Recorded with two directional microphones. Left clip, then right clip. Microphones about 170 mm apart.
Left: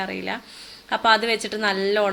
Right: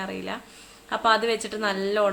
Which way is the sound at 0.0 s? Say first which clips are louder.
Left 4 dB; 15° left (ahead or behind).